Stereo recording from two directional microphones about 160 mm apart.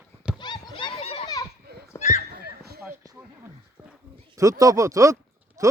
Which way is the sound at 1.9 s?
45° left (ahead or behind).